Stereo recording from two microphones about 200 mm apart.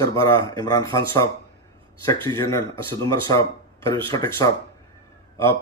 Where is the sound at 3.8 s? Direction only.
25° right (ahead or behind).